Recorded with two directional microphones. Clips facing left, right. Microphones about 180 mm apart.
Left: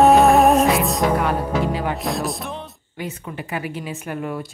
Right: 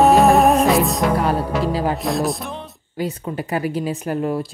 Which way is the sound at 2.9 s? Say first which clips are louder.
Right 6 dB; 35° right (ahead or behind).